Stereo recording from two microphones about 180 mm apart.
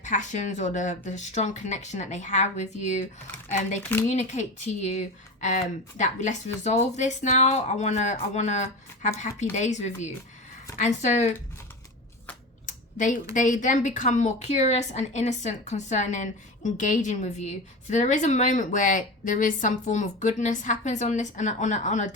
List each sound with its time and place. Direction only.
0.0 s speech: 45° left (ahead or behind)
4.1 s speech: 40° left (ahead or behind)
12.6 s a sound: 45° left (ahead or behind)
13.3 s a woman's voice: 45° left (ahead or behind)